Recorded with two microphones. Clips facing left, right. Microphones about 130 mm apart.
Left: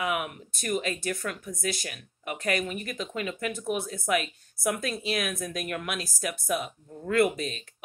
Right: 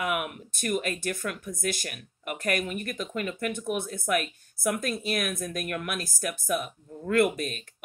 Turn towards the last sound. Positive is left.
turn(degrees=-50)  # may be behind; listen again after turning